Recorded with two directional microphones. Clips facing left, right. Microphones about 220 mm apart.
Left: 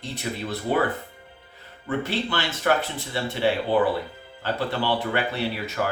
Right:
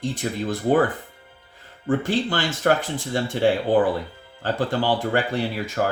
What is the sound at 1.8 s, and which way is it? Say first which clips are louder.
Speech: right 5 dB; 50° right (ahead or behind).